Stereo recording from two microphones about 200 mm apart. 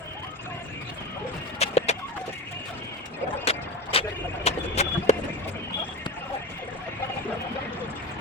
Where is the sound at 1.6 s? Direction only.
30° left (ahead or behind).